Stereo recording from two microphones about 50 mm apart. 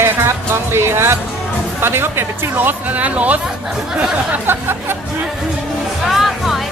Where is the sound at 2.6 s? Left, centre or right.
Right.